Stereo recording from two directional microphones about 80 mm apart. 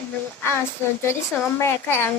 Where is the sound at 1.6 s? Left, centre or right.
Left.